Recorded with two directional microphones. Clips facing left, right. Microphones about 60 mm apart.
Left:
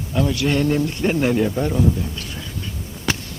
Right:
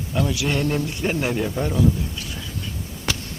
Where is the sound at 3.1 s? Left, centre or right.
Left.